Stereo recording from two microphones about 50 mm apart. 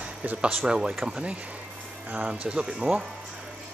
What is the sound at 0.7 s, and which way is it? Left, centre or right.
Speech, centre.